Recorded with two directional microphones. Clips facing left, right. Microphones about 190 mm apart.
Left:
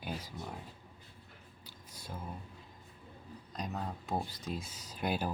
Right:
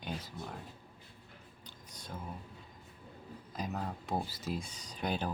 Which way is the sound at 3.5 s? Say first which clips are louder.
Right 1 dB; centre (ahead or behind).